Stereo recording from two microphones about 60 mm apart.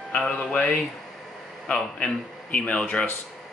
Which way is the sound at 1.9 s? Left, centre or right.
Left.